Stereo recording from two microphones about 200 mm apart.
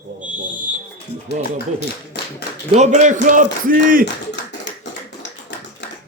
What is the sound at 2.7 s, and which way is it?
A man's voice, 35° right (ahead or behind).